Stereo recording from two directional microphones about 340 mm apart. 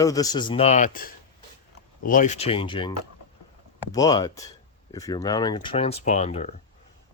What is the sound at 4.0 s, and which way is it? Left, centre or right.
Speech, centre.